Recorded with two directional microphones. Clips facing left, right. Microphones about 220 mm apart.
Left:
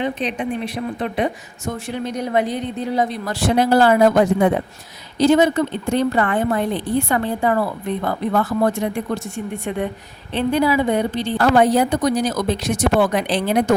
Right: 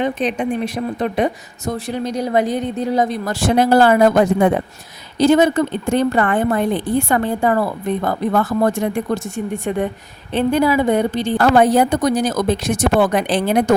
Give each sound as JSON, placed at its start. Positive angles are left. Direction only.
{"t": 0.0, "sound": "a woman's voice", "side_deg": -45}
{"t": 5.2, "sound": "a woman's voice", "side_deg": -50}